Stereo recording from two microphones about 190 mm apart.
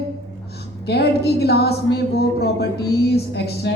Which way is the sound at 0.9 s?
60° left (ahead or behind).